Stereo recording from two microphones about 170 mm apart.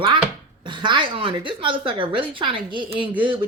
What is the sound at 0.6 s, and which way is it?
Speech, 30° right (ahead or behind).